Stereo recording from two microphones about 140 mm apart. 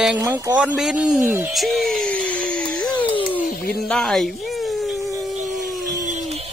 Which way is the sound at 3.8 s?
5° left (ahead or behind).